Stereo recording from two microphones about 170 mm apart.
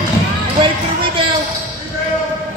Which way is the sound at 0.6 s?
30° right (ahead or behind).